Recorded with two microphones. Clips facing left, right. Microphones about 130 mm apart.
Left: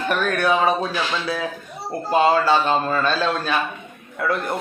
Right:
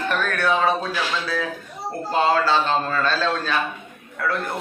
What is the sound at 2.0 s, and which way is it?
A man's voice, 15° left (ahead or behind).